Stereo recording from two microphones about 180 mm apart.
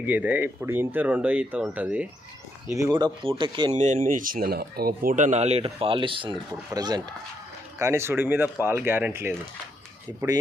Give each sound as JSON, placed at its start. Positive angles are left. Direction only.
{"t": 0.0, "sound": "speech", "side_deg": -10}
{"t": 2.7, "sound": "speech", "side_deg": -20}
{"t": 3.8, "sound": "speech", "side_deg": -45}